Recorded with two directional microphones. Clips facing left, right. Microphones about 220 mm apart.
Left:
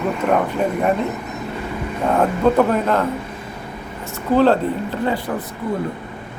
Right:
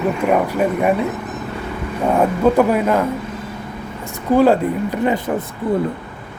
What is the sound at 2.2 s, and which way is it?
Speech, 10° right (ahead or behind).